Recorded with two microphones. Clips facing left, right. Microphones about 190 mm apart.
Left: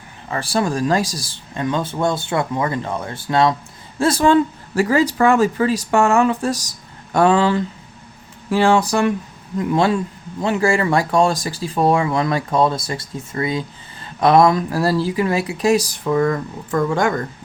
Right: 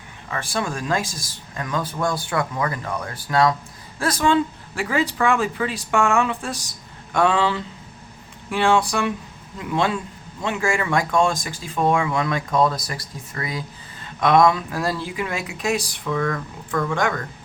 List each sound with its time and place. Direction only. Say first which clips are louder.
0.3 s speech: left 6 dB; 35° left (ahead or behind)
4.3 s speech: left 5 dB; 40° left (ahead or behind)